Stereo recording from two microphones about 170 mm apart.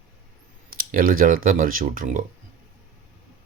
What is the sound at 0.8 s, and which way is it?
Speech, 55° right (ahead or behind).